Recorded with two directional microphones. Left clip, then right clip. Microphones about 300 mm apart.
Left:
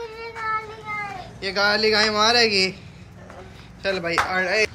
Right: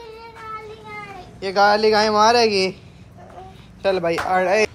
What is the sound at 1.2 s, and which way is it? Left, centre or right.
Speech, centre.